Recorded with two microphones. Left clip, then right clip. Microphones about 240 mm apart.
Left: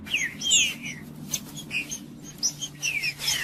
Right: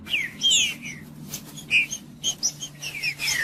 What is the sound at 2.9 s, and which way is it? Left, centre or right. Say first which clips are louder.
Bird: right 3 dB; centre.